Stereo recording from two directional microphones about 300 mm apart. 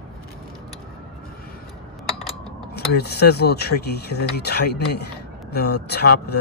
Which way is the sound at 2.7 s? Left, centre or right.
Left.